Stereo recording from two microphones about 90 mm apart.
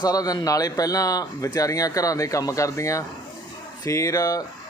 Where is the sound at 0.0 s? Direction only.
45° left (ahead or behind).